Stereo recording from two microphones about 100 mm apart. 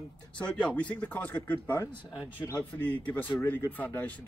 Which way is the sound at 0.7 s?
15° left (ahead or behind).